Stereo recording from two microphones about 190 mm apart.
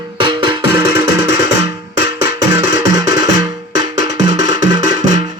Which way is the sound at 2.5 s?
20° right (ahead or behind).